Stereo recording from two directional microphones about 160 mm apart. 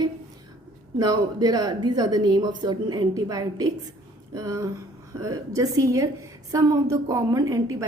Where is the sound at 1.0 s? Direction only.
25° right (ahead or behind).